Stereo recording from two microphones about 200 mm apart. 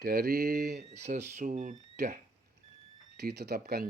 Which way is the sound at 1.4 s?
40° right (ahead or behind).